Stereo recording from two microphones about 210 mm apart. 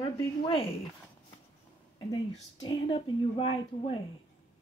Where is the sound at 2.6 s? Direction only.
25° left (ahead or behind).